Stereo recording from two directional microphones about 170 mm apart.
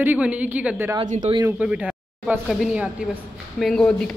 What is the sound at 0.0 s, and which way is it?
Speech, 10° right (ahead or behind).